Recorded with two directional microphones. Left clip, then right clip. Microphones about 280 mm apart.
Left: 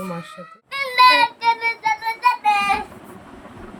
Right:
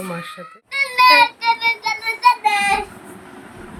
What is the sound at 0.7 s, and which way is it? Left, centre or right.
Child singing, left.